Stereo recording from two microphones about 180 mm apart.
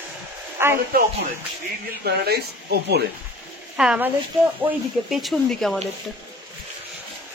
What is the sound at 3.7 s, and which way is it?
Speech, 5° right (ahead or behind).